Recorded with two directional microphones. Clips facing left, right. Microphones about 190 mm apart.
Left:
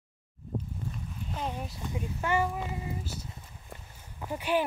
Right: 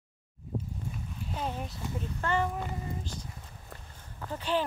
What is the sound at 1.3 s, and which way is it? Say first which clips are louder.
Speech: even; centre (ahead or behind).